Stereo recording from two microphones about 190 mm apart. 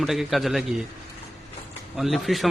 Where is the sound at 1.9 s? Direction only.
Centre (ahead or behind).